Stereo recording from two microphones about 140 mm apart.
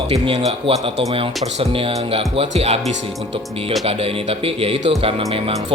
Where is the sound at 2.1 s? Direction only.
45° right (ahead or behind).